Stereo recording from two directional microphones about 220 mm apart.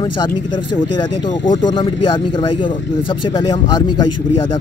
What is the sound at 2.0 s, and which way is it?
Speech, 20° left (ahead or behind).